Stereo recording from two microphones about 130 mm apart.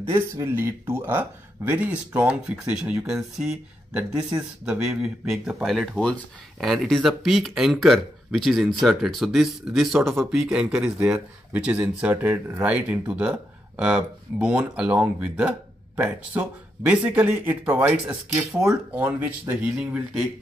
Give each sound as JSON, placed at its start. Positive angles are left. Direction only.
{"t": 0.0, "sound": "speech", "side_deg": -20}